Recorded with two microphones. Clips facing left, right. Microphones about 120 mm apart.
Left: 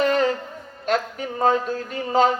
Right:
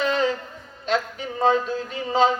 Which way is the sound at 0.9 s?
50° left (ahead or behind).